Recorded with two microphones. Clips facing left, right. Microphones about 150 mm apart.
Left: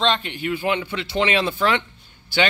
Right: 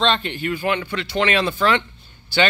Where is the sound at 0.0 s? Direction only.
10° left (ahead or behind).